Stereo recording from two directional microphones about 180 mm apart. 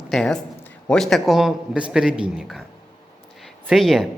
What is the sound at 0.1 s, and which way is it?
Speech, 5° left (ahead or behind).